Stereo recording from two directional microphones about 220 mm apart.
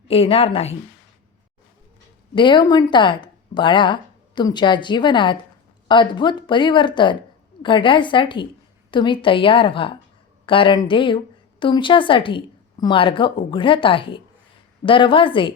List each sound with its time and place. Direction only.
0.1 s speech: 25° left (ahead or behind)
2.3 s speech: 20° left (ahead or behind)